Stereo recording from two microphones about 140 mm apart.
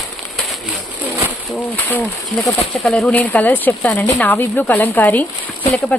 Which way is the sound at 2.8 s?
5° left (ahead or behind).